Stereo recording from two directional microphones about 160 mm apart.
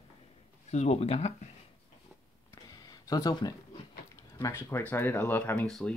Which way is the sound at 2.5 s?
25° left (ahead or behind).